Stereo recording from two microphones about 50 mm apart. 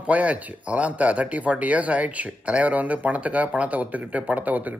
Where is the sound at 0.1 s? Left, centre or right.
Right.